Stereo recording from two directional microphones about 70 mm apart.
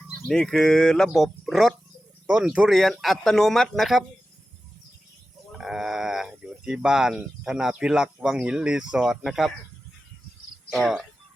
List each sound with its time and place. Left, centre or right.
0.1 s speech: centre
2.3 s speech: centre
2.6 s speech: centre
5.5 s speech: centre
10.7 s speech: centre